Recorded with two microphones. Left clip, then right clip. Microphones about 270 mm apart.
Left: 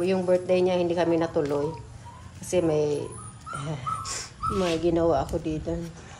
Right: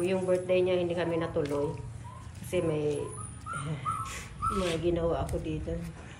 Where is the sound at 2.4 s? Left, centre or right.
Centre.